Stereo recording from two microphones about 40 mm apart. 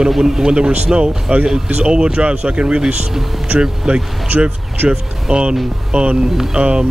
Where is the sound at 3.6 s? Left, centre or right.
Centre.